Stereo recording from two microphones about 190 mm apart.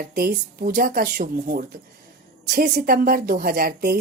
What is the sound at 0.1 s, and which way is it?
Speech, 55° right (ahead or behind).